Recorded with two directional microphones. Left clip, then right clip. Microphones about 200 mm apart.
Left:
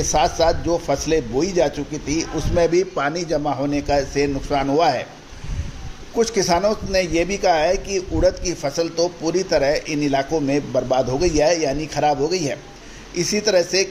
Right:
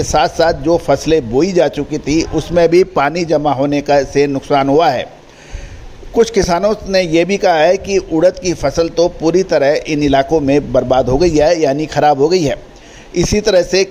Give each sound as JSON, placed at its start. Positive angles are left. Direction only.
{"t": 0.0, "sound": "a man's voice", "side_deg": -45}
{"t": 6.1, "sound": "a man's voice", "side_deg": -45}